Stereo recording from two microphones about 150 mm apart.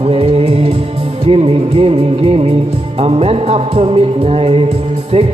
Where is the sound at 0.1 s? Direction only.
40° right (ahead or behind).